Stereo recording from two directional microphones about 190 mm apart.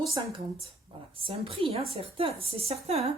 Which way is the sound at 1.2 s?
30° right (ahead or behind).